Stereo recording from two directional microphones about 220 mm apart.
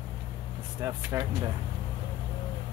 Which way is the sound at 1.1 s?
15° right (ahead or behind).